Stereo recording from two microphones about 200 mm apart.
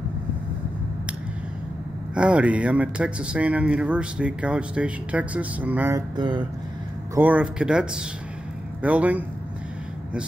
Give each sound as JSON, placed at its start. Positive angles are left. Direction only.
{"t": 2.1, "sound": "speech", "side_deg": -5}
{"t": 7.2, "sound": "speech", "side_deg": -5}